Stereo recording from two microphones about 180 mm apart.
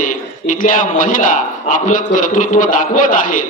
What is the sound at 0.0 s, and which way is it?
A man's voice, 45° left (ahead or behind).